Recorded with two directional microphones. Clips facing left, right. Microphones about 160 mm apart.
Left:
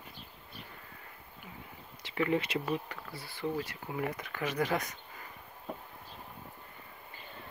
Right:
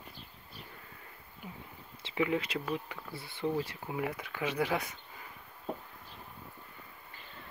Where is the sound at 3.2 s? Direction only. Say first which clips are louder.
Right 2 dB; 25° right (ahead or behind).